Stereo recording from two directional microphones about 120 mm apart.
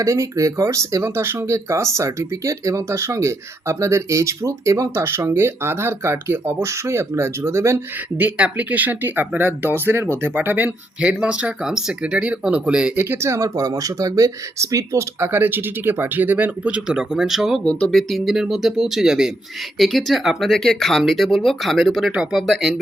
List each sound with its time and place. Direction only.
0.0 s speech: 25° right (ahead or behind); by 13.1 s 10° right (ahead or behind)
13.1 s speech: 20° right (ahead or behind); by 17.6 s 5° right (ahead or behind)
17.7 s speech: 10° left (ahead or behind)